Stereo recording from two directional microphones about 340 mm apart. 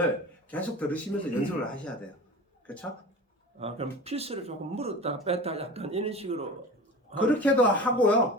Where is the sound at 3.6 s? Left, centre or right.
Centre.